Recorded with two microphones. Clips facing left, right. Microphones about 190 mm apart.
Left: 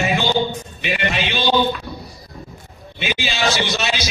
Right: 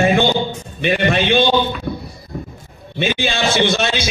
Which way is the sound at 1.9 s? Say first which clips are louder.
Right 8 dB; 55° right (ahead or behind).